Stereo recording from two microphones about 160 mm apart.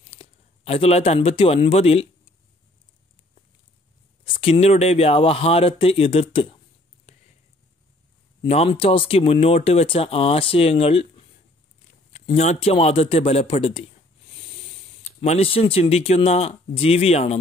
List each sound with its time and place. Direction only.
0.1 s speech: 35° left (ahead or behind)
4.2 s speech: 35° left (ahead or behind)
8.4 s speech: 35° left (ahead or behind)